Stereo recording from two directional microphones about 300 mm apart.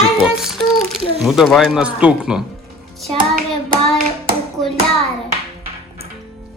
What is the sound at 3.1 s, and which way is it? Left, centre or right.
Hands, right.